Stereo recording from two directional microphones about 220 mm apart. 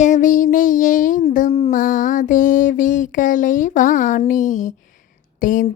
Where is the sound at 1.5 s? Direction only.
30° left (ahead or behind).